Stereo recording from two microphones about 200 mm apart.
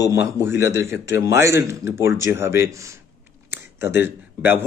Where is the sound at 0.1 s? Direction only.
15° right (ahead or behind).